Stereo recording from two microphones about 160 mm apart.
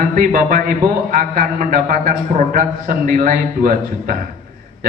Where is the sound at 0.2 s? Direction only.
60° right (ahead or behind).